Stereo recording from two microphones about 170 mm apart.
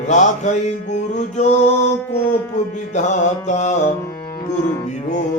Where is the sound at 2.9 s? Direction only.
45° left (ahead or behind).